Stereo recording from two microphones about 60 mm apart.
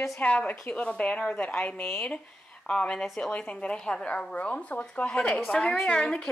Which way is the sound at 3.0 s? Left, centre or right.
Centre.